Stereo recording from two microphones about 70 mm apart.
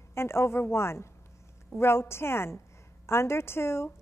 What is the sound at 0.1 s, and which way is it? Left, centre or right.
A woman's voice, left.